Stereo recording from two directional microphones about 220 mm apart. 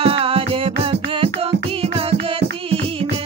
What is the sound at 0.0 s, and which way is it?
Music, 25° right (ahead or behind).